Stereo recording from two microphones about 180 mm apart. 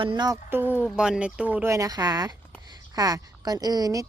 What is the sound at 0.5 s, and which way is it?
A woman's voice, 10° right (ahead or behind).